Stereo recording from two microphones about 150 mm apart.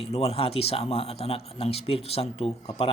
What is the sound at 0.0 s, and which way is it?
Speech, 40° left (ahead or behind).